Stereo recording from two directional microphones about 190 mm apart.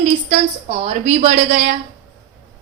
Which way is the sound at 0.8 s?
35° right (ahead or behind).